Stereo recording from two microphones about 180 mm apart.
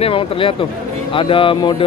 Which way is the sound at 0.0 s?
30° left (ahead or behind).